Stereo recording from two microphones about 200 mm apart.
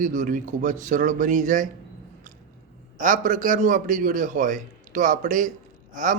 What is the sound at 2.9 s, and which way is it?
Speech, 40° right (ahead or behind).